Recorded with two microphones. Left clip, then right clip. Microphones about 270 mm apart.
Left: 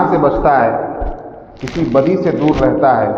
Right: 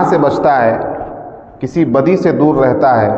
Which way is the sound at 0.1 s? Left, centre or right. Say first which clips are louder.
Right 1 dB; right.